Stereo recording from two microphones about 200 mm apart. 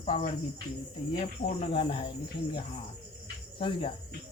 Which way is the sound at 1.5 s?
25° left (ahead or behind).